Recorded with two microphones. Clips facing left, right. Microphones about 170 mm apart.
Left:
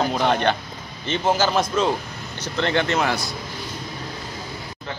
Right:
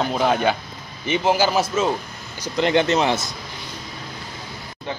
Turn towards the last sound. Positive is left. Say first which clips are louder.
# right 3 dB
turn(degrees=-20)  # may be behind; listen again after turning